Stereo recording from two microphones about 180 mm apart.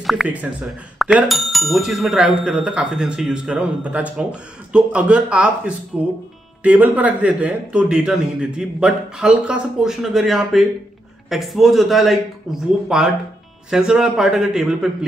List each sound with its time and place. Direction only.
0.0 s speech: centre (ahead or behind)